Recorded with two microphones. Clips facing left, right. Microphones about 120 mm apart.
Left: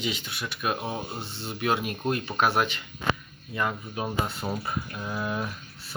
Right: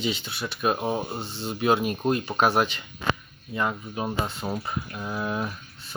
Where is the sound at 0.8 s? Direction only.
15° right (ahead or behind).